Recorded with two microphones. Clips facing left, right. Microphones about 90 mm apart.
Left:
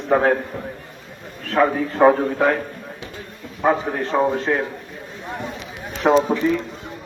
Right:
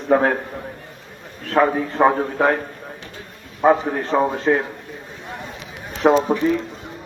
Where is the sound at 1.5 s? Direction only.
25° right (ahead or behind).